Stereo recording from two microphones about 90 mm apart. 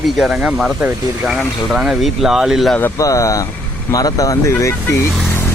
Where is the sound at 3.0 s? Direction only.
40° left (ahead or behind).